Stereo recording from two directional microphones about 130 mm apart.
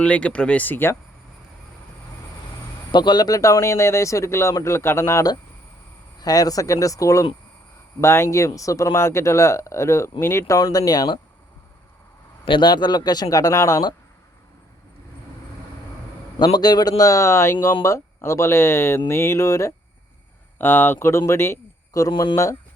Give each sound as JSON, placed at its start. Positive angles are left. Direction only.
{"t": 0.0, "sound": "speech", "side_deg": 10}
{"t": 2.9, "sound": "speech", "side_deg": 35}
{"t": 12.5, "sound": "speech", "side_deg": 35}
{"t": 16.4, "sound": "speech", "side_deg": 30}
{"t": 22.1, "sound": "speech", "side_deg": 40}